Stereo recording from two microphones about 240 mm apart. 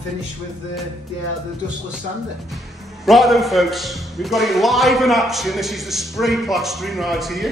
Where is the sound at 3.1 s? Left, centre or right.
Centre.